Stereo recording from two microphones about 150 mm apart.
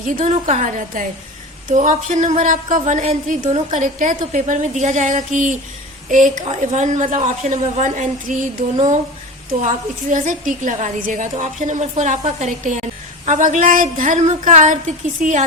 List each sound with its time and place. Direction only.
0.2 s a woman's voice: 55° right (ahead or behind)
9.6 s a woman's voice: 55° right (ahead or behind)